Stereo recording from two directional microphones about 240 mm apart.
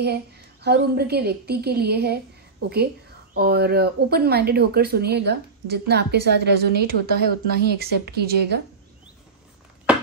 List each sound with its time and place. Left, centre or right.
0.0 s speech: right
3.3 s speech: right